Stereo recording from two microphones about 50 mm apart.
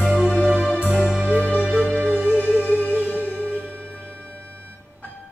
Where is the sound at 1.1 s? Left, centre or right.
Centre.